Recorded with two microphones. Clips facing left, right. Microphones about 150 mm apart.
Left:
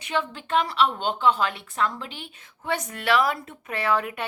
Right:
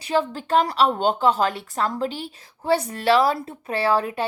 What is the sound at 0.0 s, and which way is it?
A woman's voice, 35° right (ahead or behind).